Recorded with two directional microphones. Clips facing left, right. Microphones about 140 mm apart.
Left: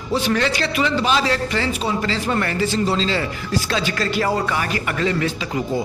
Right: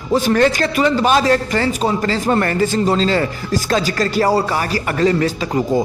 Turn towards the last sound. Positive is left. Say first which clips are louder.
# right 6 dB
turn(degrees=-40)  # may be behind; listen again after turning